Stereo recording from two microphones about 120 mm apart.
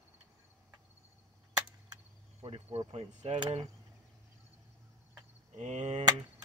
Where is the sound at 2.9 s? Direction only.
60° right (ahead or behind).